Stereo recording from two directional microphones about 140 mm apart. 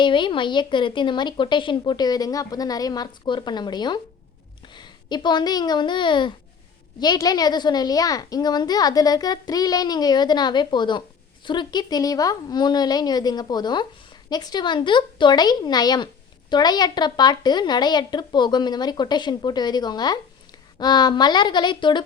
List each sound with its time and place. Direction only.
0.0 s a woman's voice: 35° left (ahead or behind)